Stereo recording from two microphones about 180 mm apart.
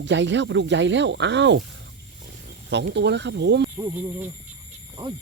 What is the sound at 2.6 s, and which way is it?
Speech, 70° right (ahead or behind).